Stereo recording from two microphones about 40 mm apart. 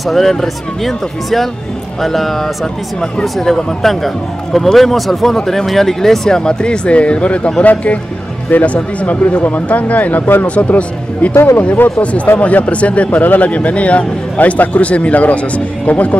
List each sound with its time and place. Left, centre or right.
0.0 s speech: centre; by 10.4 s left
10.4 s speech: left
11.5 s speech: left